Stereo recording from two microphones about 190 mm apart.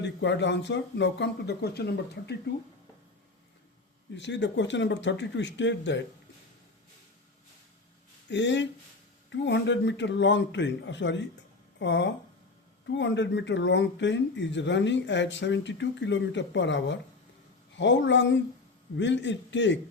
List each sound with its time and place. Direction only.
0.0 s speech: 70° left (ahead or behind)
4.1 s speech: 70° left (ahead or behind)
8.3 s speech: 70° left (ahead or behind)